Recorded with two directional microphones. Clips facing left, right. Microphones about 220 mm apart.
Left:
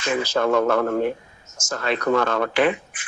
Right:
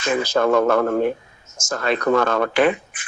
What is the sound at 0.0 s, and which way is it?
Speech, 45° right (ahead or behind).